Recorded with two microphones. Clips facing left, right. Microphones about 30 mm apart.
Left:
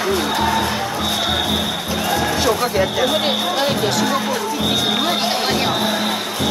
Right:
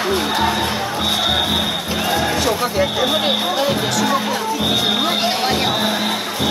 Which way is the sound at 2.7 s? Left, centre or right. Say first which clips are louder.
Even; centre.